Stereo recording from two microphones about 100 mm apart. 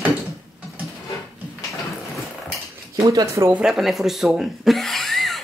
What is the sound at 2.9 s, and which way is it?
Speech, 35° right (ahead or behind).